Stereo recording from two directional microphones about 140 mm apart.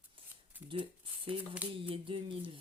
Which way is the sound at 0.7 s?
40° right (ahead or behind).